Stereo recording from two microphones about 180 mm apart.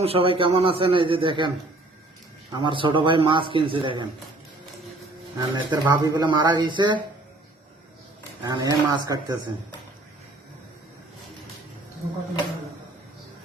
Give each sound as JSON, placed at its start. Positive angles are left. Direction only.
{"t": 0.0, "sound": "speech", "side_deg": -30}
{"t": 2.5, "sound": "speech", "side_deg": -25}
{"t": 5.4, "sound": "speech", "side_deg": -20}
{"t": 8.4, "sound": "speech", "side_deg": -20}